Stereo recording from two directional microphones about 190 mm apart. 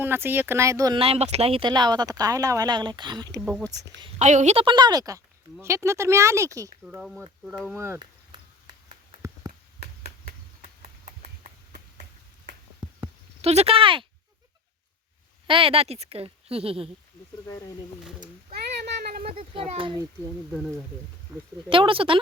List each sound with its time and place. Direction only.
0.0 s speech: 10° right (ahead or behind)
0.9 s speech: 30° right (ahead or behind)
4.2 s speech: 40° right (ahead or behind); by 6.7 s 15° right (ahead or behind)
6.8 s speech: 5° right (ahead or behind)
7.8 s speech: 15° right (ahead or behind)
8.3 s a sound: 25° right (ahead or behind)
10.6 s a sound: 35° right (ahead or behind)
12.8 s a sound: 5° right (ahead or behind)
13.4 s a woman's voice: 35° right (ahead or behind)
15.4 s a woman's voice: 30° right (ahead or behind)
17.4 s speech: 15° left (ahead or behind)
18.2 s a sound: 55° right (ahead or behind)
19.4 s speech: 30° right (ahead or behind)
21.7 s speech: 25° right (ahead or behind)